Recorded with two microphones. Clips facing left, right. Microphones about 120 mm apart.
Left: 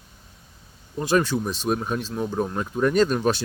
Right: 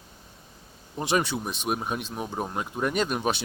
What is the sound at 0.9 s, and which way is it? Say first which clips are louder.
Speech: left 4 dB; 15° right (ahead or behind).